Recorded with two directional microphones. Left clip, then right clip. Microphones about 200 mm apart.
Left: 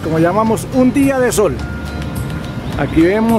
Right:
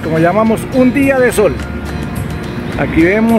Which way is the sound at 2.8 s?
10° left (ahead or behind).